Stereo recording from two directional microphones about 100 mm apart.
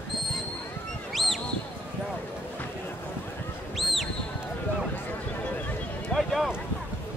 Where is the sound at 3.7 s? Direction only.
Centre (ahead or behind).